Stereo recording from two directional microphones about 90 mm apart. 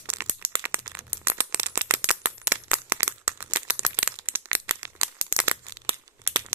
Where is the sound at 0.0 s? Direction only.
20° right (ahead or behind).